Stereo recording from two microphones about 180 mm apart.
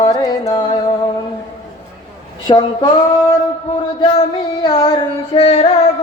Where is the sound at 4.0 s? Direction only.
30° left (ahead or behind).